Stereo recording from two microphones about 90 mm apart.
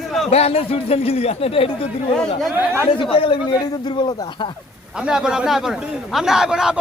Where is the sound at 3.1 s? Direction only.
90° left.